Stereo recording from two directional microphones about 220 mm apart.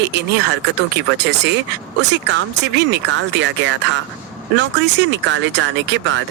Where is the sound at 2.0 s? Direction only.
55° right (ahead or behind).